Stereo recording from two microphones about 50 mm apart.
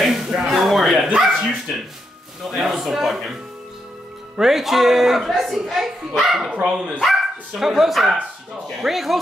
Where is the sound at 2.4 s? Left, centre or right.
Centre.